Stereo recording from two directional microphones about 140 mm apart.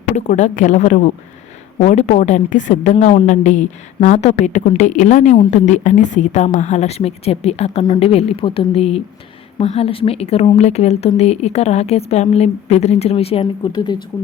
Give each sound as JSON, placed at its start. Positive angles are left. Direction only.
{"t": 0.2, "sound": "a woman's voice", "side_deg": 60}
{"t": 2.9, "sound": "a woman's voice", "side_deg": 50}